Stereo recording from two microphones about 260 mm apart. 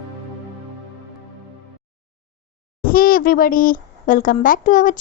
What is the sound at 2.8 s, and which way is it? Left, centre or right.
A child's voice, left.